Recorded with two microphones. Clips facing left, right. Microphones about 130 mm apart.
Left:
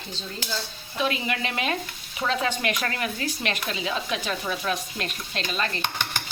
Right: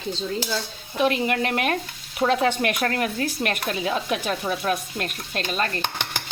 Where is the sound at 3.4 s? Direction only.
50° right (ahead or behind).